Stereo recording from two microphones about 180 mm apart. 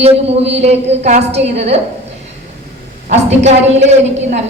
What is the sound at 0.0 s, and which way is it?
A woman's voice, 35° right (ahead or behind).